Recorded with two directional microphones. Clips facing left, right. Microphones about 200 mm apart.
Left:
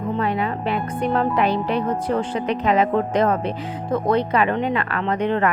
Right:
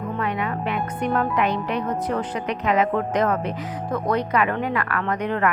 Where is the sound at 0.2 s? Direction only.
30° left (ahead or behind).